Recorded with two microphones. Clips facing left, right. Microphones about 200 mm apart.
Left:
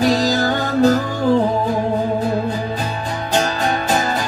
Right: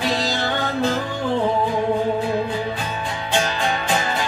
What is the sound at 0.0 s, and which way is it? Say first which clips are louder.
Music: left 7 dB; 40° left (ahead or behind).